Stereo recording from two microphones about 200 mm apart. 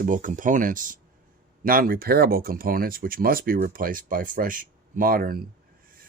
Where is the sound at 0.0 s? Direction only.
40° right (ahead or behind).